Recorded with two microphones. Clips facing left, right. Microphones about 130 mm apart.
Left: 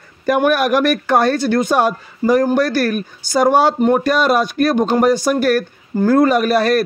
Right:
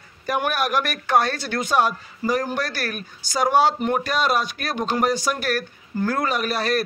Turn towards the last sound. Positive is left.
turn(degrees=55)  # may be behind; listen again after turning